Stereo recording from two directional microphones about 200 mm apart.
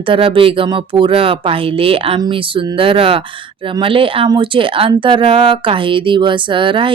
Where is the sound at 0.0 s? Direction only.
25° right (ahead or behind).